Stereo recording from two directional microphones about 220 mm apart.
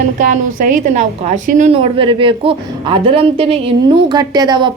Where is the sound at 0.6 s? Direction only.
35° right (ahead or behind).